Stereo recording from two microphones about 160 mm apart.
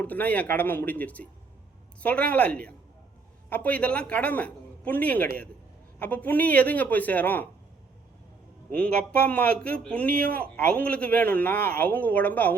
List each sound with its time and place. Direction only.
0.0 s speech: 10° left (ahead or behind)
9.2 s speech: 10° left (ahead or behind)
11.5 s speech: 70° right (ahead or behind)
11.8 s speech: 10° left (ahead or behind)